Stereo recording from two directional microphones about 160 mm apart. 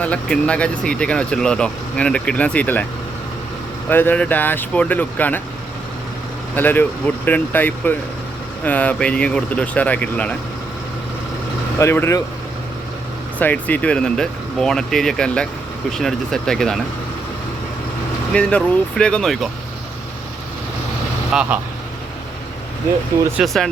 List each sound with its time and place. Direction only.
0.0 s speech: 5° left (ahead or behind)
3.8 s speech: 10° left (ahead or behind)
6.6 s speech: 10° left (ahead or behind)
11.8 s speech: 15° left (ahead or behind)
13.4 s speech: 10° left (ahead or behind)
18.3 s speech: 5° left (ahead or behind)
21.3 s speech: 5° right (ahead or behind)
23.4 s speech: 5° right (ahead or behind)